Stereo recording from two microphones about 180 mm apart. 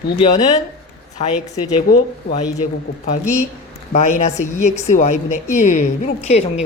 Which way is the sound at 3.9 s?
40° left (ahead or behind).